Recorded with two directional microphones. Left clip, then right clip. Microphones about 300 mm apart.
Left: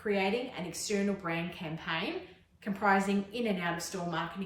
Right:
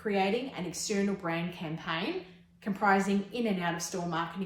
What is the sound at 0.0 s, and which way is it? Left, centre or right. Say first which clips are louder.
A woman's voice: right 1 dB; centre.